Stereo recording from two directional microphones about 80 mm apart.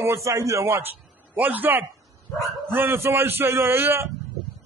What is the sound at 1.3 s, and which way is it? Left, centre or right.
Speech, right.